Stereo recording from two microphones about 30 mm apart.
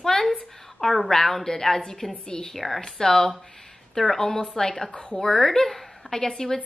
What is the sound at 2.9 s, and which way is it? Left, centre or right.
A woman's voice, centre.